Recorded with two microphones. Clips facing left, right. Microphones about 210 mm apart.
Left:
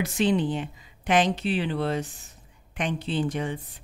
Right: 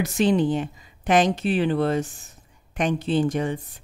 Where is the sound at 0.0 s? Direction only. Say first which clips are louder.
Right 3 dB; 45° right (ahead or behind).